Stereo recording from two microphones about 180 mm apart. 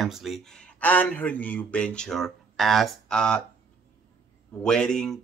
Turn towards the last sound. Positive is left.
turn(degrees=5)  # may be behind; listen again after turning